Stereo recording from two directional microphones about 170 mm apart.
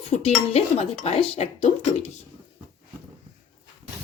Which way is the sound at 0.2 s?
40° left (ahead or behind).